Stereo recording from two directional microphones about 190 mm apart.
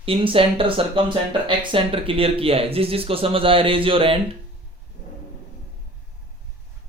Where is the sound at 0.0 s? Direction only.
30° right (ahead or behind).